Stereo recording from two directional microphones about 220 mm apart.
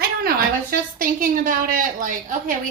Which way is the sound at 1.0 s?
40° right (ahead or behind).